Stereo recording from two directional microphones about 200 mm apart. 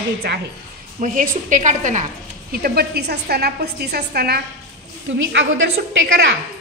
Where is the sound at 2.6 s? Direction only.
50° right (ahead or behind).